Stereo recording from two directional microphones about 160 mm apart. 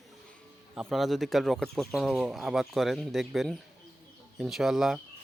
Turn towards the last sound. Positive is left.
turn(degrees=-5)  # may be behind; listen again after turning